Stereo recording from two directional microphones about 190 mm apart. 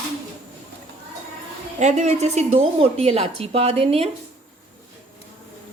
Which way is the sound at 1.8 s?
35° right (ahead or behind).